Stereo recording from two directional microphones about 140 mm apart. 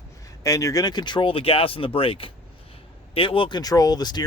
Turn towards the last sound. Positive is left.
turn(degrees=30)  # may be behind; listen again after turning